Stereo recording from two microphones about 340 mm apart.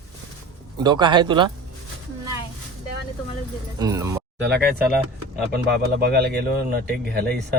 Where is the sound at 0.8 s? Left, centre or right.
Centre.